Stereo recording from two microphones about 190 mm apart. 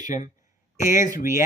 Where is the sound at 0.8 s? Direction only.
45° left (ahead or behind).